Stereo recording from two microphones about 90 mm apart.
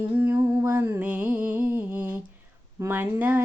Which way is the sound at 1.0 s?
15° right (ahead or behind).